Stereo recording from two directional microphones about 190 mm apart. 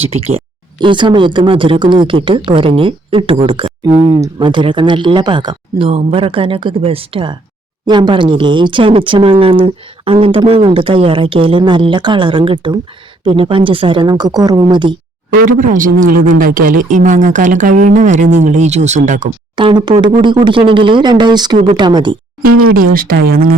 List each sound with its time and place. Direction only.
0.1 s speech: 30° right (ahead or behind)
15.3 s speech: 45° right (ahead or behind)
19.5 s speech: 25° right (ahead or behind)
22.7 s speech: 50° right (ahead or behind)